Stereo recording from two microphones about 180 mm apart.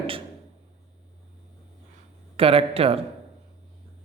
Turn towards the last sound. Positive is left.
turn(degrees=-30)  # may be behind; listen again after turning